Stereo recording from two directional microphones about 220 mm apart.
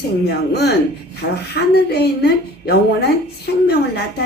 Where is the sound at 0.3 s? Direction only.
45° left (ahead or behind).